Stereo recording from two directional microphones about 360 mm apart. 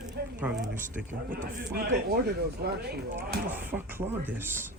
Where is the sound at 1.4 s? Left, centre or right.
Right.